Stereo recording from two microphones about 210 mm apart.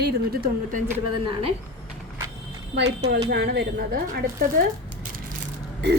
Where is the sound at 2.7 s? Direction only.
55° right (ahead or behind).